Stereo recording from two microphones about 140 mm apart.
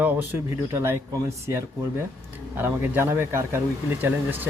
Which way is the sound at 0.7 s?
20° right (ahead or behind).